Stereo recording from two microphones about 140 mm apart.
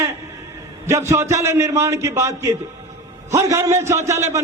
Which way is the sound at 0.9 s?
20° right (ahead or behind).